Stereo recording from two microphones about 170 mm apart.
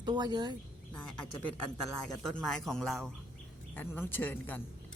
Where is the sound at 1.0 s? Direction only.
10° left (ahead or behind).